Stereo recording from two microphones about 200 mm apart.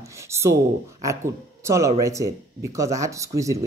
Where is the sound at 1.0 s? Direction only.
15° right (ahead or behind).